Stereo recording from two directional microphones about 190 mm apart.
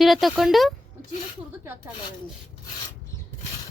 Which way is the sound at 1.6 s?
15° right (ahead or behind).